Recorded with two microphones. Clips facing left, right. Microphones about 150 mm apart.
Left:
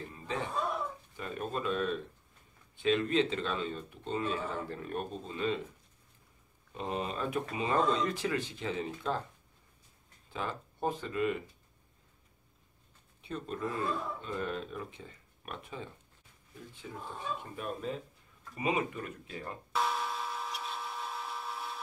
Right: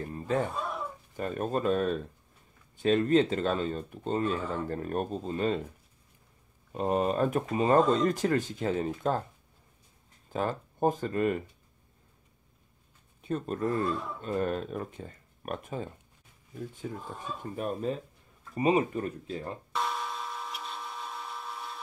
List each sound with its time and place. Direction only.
0.0 s a sound: 45° right (ahead or behind)
1.1 s speech: 45° right (ahead or behind)
6.7 s speech: 50° right (ahead or behind)
10.3 s speech: 45° right (ahead or behind)
13.2 s speech: 45° right (ahead or behind)
19.7 s a sound: centre (ahead or behind)